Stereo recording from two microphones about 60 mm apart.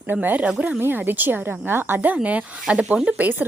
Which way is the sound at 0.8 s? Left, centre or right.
Right.